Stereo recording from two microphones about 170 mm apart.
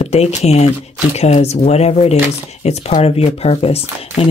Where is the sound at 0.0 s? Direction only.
40° left (ahead or behind).